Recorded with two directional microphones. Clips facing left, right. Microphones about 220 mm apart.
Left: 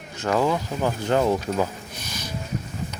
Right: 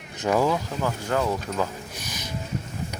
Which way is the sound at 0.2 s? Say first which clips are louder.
Even; 10° right (ahead or behind).